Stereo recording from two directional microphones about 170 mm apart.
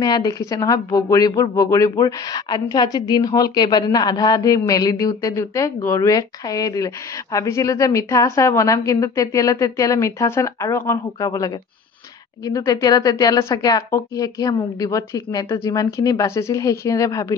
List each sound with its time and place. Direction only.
0.0 s a woman's voice: 25° left (ahead or behind)